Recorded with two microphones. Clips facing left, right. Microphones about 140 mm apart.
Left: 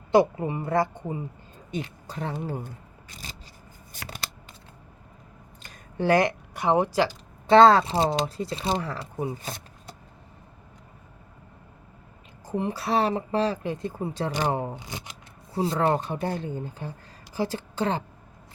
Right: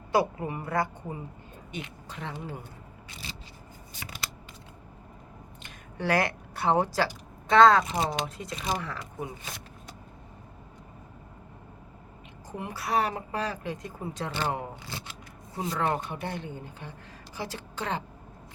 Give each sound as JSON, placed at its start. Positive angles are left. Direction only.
{"t": 0.1, "sound": "speech", "side_deg": 25}
{"t": 1.7, "sound": "speech", "side_deg": 35}
{"t": 3.1, "sound": "single-lens reflex camera", "side_deg": 45}
{"t": 5.6, "sound": "speech", "side_deg": 25}
{"t": 7.4, "sound": "speech", "side_deg": 30}
{"t": 12.5, "sound": "speech", "side_deg": 30}
{"t": 14.3, "sound": "speech", "side_deg": 15}
{"t": 14.8, "sound": "shuffling cards", "side_deg": 15}
{"t": 15.5, "sound": "a woman's voice", "side_deg": 30}